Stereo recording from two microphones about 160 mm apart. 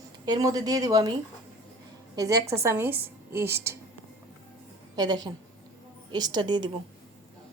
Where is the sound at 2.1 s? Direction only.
20° right (ahead or behind).